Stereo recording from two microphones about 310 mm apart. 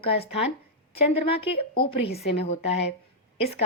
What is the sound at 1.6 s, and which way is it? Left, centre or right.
A woman's voice, centre.